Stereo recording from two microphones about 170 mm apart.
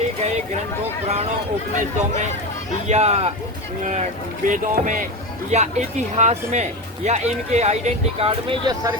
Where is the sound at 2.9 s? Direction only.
40° right (ahead or behind).